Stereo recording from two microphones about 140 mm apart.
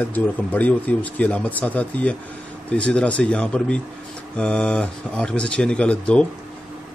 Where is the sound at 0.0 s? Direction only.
10° left (ahead or behind).